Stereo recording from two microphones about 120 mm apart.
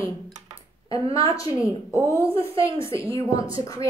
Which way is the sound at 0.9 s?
50° right (ahead or behind).